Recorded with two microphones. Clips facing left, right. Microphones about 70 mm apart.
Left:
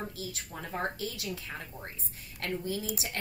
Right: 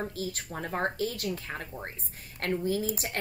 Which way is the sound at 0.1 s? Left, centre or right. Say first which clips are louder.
Right 5 dB; right.